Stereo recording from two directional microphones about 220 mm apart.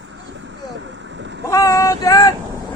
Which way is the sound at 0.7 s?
55° right (ahead or behind).